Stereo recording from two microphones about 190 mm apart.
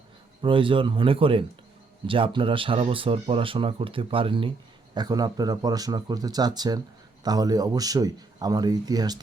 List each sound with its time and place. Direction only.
0.4 s speech: 25° right (ahead or behind)